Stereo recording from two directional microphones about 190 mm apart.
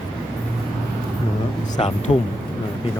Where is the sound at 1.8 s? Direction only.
30° left (ahead or behind).